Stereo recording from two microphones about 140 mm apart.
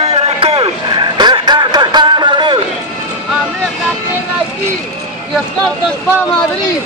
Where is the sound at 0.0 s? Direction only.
45° right (ahead or behind).